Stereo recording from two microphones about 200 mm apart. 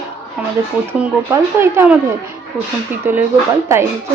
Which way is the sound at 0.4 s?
5° right (ahead or behind).